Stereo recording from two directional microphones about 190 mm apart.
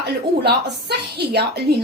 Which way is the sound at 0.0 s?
60° right (ahead or behind).